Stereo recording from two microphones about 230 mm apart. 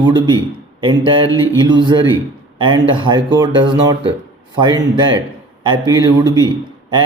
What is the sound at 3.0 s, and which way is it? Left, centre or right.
Speech, centre.